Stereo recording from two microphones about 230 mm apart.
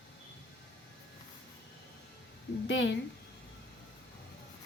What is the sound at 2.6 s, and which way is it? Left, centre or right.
Speech, left.